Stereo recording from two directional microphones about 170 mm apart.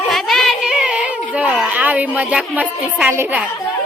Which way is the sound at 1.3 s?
5° right (ahead or behind).